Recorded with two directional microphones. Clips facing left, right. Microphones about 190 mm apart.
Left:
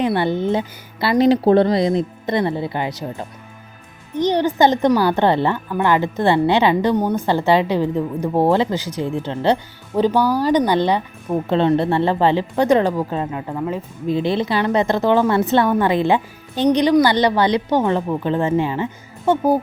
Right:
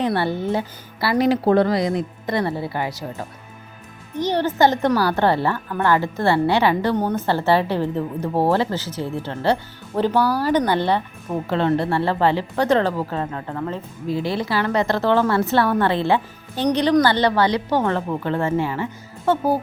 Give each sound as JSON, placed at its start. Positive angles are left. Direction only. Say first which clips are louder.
{"t": 0.0, "sound": "a woman's voice", "louder": "left 3 dB", "side_deg": 15}